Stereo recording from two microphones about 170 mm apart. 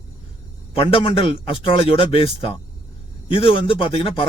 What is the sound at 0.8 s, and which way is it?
Speech, 35° left (ahead or behind).